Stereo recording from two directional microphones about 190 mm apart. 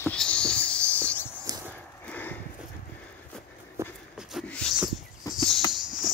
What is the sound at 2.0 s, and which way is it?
Horse, 10° left (ahead or behind).